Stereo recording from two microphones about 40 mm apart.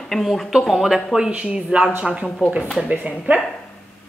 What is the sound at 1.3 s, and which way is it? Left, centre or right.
Speech, right.